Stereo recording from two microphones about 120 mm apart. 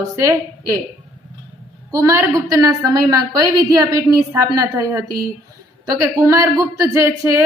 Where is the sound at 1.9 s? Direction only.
25° right (ahead or behind).